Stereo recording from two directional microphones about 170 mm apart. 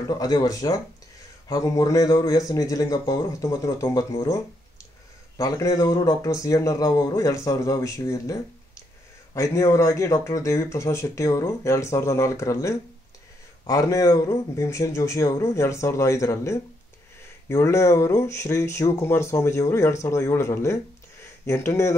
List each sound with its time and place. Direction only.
0.2 s speech: 20° left (ahead or behind)